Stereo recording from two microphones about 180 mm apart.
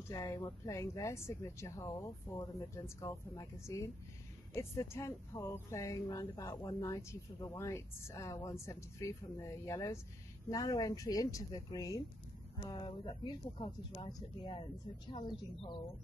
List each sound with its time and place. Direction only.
0.1 s speech: 20° left (ahead or behind)